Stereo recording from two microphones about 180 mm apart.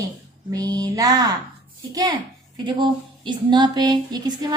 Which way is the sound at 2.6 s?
25° right (ahead or behind).